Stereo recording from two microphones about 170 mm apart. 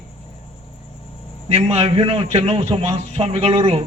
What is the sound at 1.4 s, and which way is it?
A man's voice, 35° right (ahead or behind).